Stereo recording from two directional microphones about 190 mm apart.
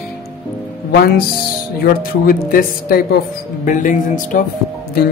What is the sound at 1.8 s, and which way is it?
Speech, 50° left (ahead or behind).